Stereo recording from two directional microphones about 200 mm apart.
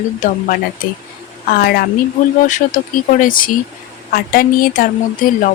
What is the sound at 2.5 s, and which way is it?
Speech, 40° left (ahead or behind).